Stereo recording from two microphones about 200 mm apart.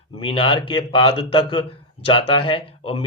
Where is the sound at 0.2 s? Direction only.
25° left (ahead or behind).